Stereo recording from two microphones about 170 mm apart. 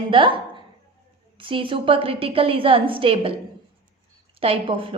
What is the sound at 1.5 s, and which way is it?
A woman's voice, 30° right (ahead or behind).